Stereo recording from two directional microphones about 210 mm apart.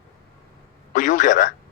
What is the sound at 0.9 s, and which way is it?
Speech, 35° left (ahead or behind).